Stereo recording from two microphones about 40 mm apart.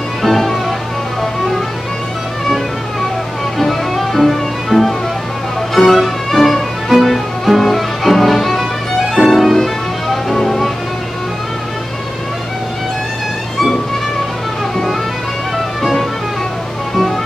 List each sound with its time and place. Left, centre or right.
0.2 s music: centre
3.5 s music: centre
9.1 s violin: centre
10.3 s music: centre
15.5 s music: centre